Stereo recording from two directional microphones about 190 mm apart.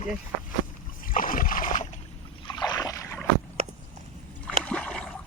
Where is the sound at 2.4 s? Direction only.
20° left (ahead or behind).